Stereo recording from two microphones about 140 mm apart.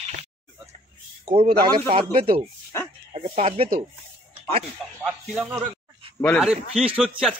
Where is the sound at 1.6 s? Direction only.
40° right (ahead or behind).